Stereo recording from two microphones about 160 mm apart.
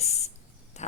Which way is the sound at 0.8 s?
45° left (ahead or behind).